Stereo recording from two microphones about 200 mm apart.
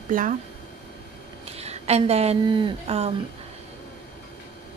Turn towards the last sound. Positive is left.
turn(degrees=-30)  # may be behind; listen again after turning